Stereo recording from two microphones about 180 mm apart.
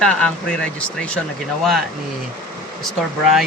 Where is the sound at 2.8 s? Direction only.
Centre (ahead or behind).